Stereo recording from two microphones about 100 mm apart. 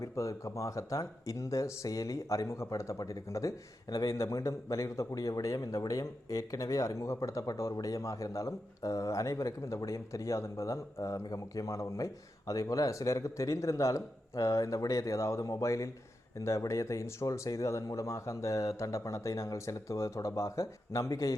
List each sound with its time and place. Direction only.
0.0 s speech: 30° left (ahead or behind)